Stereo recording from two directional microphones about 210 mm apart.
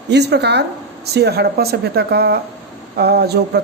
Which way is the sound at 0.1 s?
50° right (ahead or behind).